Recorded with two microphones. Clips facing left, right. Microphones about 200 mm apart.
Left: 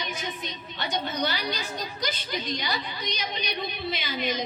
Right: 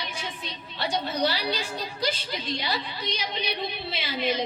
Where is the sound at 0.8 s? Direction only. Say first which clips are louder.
Right 3 dB; 30° right (ahead or behind).